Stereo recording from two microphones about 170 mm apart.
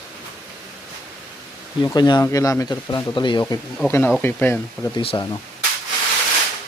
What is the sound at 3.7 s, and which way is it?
Speech, 10° left (ahead or behind).